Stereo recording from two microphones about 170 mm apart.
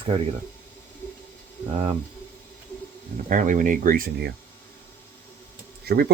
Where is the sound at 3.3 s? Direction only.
50° right (ahead or behind); by 4.3 s 65° right (ahead or behind).